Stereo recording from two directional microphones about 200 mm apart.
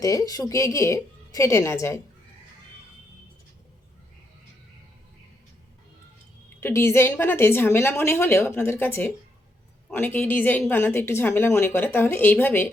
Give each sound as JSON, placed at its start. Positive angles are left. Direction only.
{"t": 0.0, "sound": "a woman's voice", "side_deg": 15}
{"t": 6.6, "sound": "a woman's voice", "side_deg": 10}